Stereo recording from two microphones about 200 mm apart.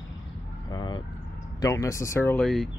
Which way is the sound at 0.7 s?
20° left (ahead or behind).